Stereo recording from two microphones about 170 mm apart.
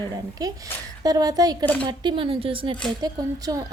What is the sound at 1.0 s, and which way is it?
Speech, 20° right (ahead or behind).